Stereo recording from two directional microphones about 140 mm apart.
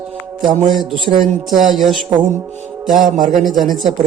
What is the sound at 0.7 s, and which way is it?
Music, centre (ahead or behind).